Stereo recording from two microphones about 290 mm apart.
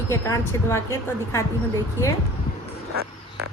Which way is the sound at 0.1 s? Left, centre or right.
Centre.